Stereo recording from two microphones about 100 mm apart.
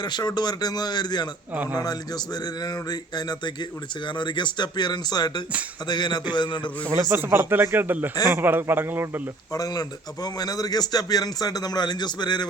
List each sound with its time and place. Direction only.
0.0 s speech: 45° left (ahead or behind)
1.5 s speech: 15° right (ahead or behind)
1.8 s speech: 40° left (ahead or behind)
7.1 s speech: 20° right (ahead or behind)
9.5 s a man's voice: 40° left (ahead or behind)